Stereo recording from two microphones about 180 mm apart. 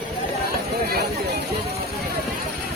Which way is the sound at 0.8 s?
60° right (ahead or behind).